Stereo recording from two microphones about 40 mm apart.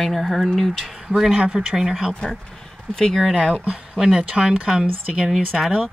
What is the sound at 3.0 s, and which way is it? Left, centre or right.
Speech, centre.